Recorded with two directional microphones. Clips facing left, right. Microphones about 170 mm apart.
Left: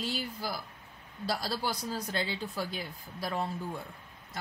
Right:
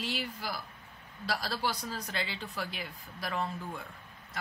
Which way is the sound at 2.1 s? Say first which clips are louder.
Left 4 dB; 40° left (ahead or behind).